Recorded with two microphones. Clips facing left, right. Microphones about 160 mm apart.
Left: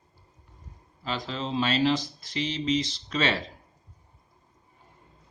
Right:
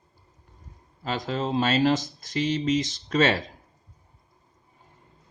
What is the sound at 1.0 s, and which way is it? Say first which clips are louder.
Speech: right 4 dB; 45° right (ahead or behind).